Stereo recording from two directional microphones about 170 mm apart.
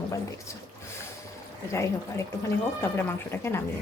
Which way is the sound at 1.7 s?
15° left (ahead or behind).